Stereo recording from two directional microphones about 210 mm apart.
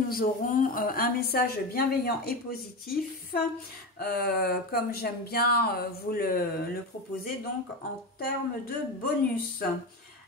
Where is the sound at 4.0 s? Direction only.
45° left (ahead or behind).